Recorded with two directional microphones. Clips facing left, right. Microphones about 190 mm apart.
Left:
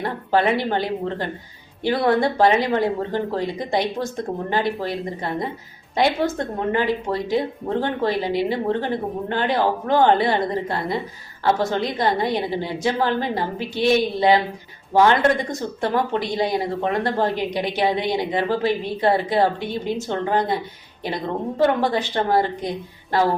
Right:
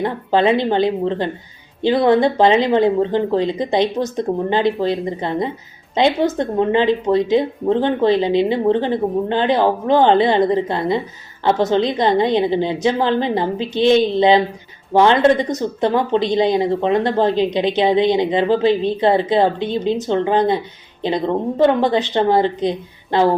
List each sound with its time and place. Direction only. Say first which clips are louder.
0.0 s speech: right 4 dB; 20° right (ahead or behind)
21.6 s speech: right 4 dB; 20° right (ahead or behind)